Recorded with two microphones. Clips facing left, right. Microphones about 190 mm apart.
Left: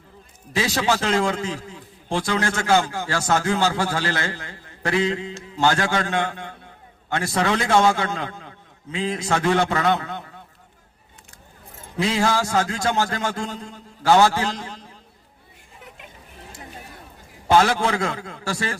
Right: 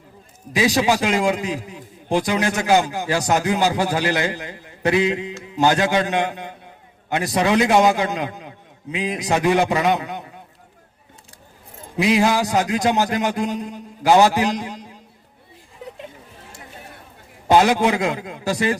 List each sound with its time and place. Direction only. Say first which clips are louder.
0.5 s a man's voice: right 4 dB; 15° right (ahead or behind)
11.9 s a man's voice: right 4 dB; 15° right (ahead or behind)
17.5 s a man's voice: right 3 dB; 15° right (ahead or behind)